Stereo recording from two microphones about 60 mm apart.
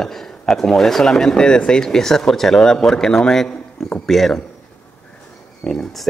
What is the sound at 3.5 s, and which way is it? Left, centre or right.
Speech, left.